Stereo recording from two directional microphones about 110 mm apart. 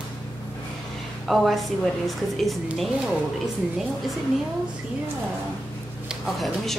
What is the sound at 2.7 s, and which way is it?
Speech, centre (ahead or behind).